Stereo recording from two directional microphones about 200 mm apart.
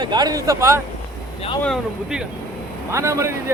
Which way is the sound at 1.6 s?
Centre (ahead or behind).